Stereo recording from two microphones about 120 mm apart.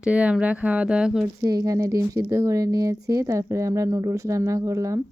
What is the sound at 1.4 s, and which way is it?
Speech, 30° right (ahead or behind).